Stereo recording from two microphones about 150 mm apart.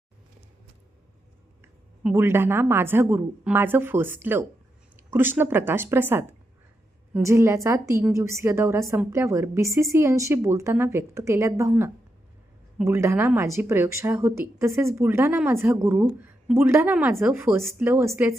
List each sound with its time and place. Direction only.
1.6 s a woman's voice: 15° right (ahead or behind)
16.0 s speech: 5° right (ahead or behind)